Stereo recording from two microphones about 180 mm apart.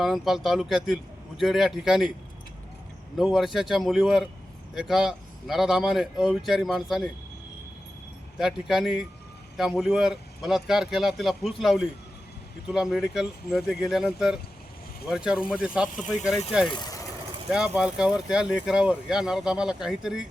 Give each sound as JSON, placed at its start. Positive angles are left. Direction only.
{"t": 0.0, "sound": "speech", "side_deg": 0}
{"t": 3.2, "sound": "speech", "side_deg": 0}
{"t": 8.4, "sound": "speech", "side_deg": 0}
{"t": 16.6, "sound": "speech", "side_deg": 25}
{"t": 17.7, "sound": "speech", "side_deg": -5}